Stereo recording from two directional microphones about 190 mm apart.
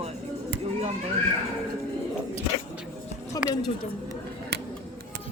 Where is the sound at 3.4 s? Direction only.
20° left (ahead or behind).